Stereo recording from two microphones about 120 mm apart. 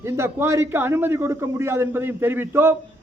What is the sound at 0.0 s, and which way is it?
A man's voice, 25° right (ahead or behind).